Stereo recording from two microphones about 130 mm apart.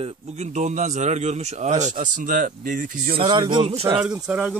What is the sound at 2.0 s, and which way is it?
Speech, 90° right.